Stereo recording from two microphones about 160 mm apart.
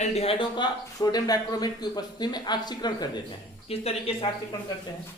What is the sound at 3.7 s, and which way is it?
Speech, 35° left (ahead or behind).